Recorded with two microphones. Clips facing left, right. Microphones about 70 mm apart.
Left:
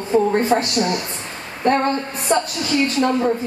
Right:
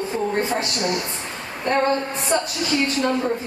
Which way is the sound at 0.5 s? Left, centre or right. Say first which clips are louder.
Left 5 dB; left.